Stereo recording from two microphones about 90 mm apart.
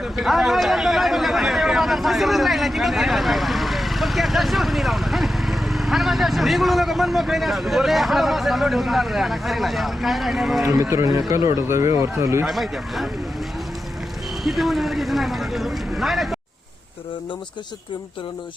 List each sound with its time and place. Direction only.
0.0 s a man's voice: centre (ahead or behind)
10.8 s speech: 40° right (ahead or behind)
12.5 s speech: centre (ahead or behind)
14.4 s speech: centre (ahead or behind)